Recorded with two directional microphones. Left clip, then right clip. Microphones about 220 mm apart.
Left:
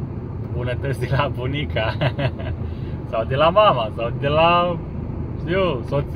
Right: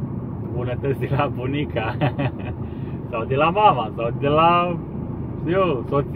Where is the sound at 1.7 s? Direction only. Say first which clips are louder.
Left 5 dB; 15° left (ahead or behind).